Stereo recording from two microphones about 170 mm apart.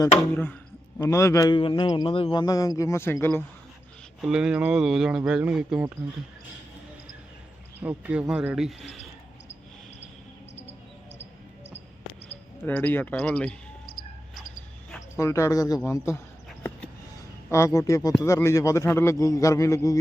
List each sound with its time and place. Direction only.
0.9 s a man's voice: 15° left (ahead or behind)
4.2 s speech: 5° right (ahead or behind)
7.8 s speech: 10° right (ahead or behind)
12.6 s speech: 10° left (ahead or behind)
13.9 s cricket: 65° left (ahead or behind)
15.1 s a man's voice: 15° left (ahead or behind)
17.5 s a man's voice: 15° left (ahead or behind)